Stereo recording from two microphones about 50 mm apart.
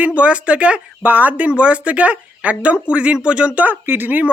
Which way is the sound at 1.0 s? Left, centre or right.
Right.